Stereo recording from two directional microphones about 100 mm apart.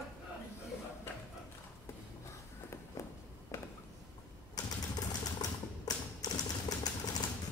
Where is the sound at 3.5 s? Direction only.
30° left (ahead or behind).